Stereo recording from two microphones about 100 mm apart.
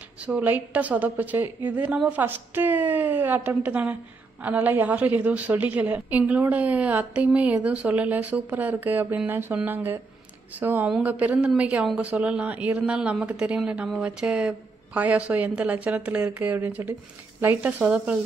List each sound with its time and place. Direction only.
0.2 s a woman's voice: 15° right (ahead or behind)
10.6 s a woman's voice: 20° right (ahead or behind)